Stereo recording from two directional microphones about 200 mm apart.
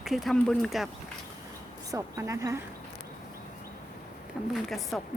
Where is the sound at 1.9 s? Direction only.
15° right (ahead or behind).